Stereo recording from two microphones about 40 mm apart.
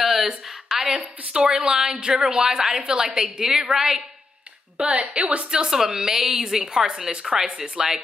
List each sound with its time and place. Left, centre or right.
0.0 s a sound: centre
0.8 s a woman's voice: centre
4.7 s a woman's voice: right
5.5 s a woman's voice: centre